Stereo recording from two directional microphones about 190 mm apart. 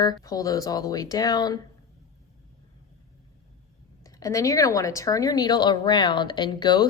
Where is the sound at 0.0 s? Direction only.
20° left (ahead or behind).